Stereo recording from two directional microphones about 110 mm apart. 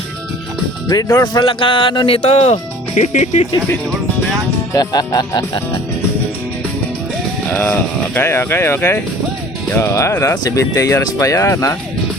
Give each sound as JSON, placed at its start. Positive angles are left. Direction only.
{"t": 1.2, "sound": "speech", "side_deg": 40}
{"t": 1.5, "sound": "speech", "side_deg": 55}
{"t": 4.7, "sound": "speech", "side_deg": 35}
{"t": 7.4, "sound": "speech", "side_deg": 15}